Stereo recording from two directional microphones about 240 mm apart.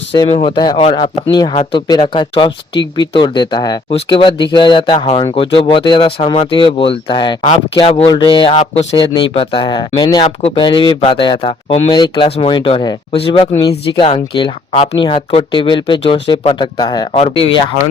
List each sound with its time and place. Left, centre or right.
0.1 s speech: left